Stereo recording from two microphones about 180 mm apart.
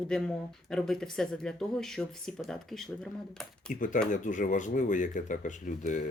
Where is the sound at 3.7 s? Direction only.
45° left (ahead or behind).